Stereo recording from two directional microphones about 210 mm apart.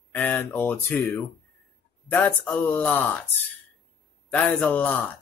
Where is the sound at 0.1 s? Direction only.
10° left (ahead or behind).